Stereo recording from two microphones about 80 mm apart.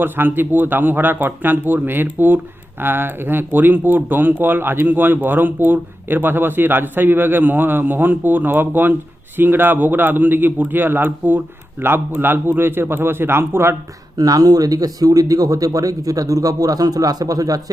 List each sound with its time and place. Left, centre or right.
0.0 s speech: right
14.2 s speech: right